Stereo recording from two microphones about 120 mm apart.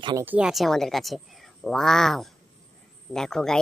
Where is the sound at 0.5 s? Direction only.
Centre (ahead or behind).